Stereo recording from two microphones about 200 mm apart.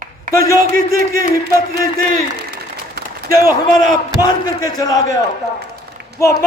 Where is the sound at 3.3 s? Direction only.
15° left (ahead or behind).